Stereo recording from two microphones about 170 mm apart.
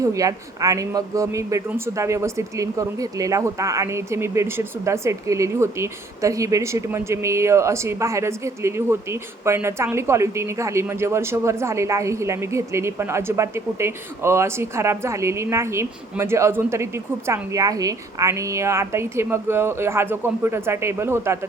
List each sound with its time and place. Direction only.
0.0 s speech: 20° right (ahead or behind)